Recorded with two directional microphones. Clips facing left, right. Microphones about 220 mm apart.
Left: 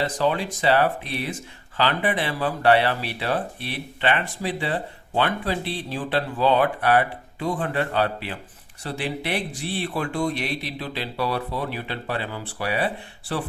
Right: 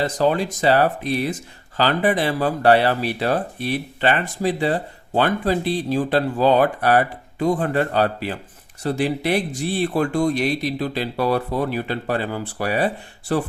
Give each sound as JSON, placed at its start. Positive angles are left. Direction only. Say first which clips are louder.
{"t": 0.0, "sound": "speech", "louder": "right 4 dB", "side_deg": -40}